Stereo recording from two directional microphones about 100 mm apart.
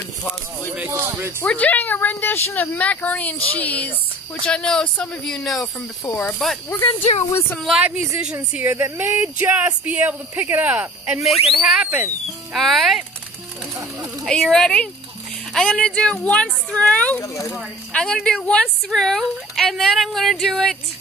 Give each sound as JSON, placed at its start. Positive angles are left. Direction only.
{"t": 0.8, "sound": "speech", "side_deg": -25}
{"t": 1.4, "sound": "a woman's voice", "side_deg": 15}
{"t": 6.8, "sound": "speech", "side_deg": 70}
{"t": 7.6, "sound": "speech", "side_deg": -5}
{"t": 13.7, "sound": "a sound", "side_deg": -30}
{"t": 14.2, "sound": "a woman's voice", "side_deg": 5}
{"t": 17.2, "sound": "speech", "side_deg": 30}
{"t": 17.6, "sound": "a woman's voice", "side_deg": 10}